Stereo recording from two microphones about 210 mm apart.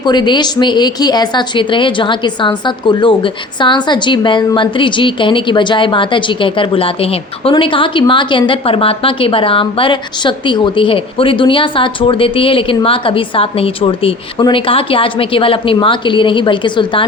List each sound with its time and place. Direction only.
0.0 s speech: 20° left (ahead or behind)